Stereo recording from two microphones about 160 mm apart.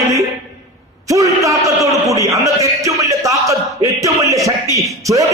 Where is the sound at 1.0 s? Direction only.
20° right (ahead or behind).